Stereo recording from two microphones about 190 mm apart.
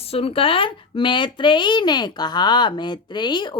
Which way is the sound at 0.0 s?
30° left (ahead or behind).